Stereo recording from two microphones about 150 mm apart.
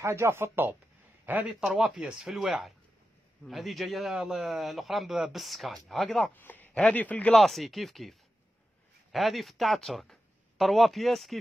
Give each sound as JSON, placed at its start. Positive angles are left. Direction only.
{"t": 0.0, "sound": "a man's voice", "side_deg": -15}
{"t": 6.3, "sound": "a man's voice", "side_deg": 10}